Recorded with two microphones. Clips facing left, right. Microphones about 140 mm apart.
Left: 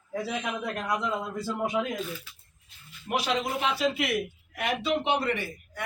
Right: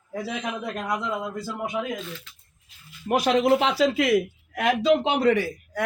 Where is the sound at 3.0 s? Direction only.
40° right (ahead or behind).